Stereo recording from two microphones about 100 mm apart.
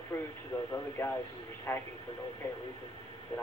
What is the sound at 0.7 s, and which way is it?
Speech, 25° left (ahead or behind).